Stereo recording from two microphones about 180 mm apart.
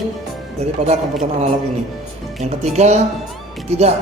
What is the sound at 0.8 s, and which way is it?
Speech, 40° right (ahead or behind).